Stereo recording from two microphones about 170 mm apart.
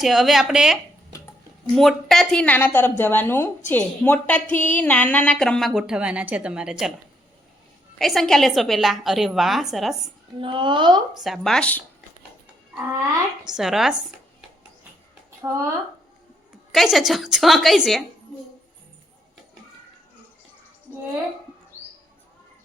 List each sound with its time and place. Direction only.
0.0 s speech: centre (ahead or behind)
7.9 s speech: centre (ahead or behind)
10.4 s speech: 30° right (ahead or behind)
11.2 s speech: centre (ahead or behind)
13.4 s speech: 5° right (ahead or behind)
15.4 s speech: 15° right (ahead or behind)
16.7 s speech: centre (ahead or behind)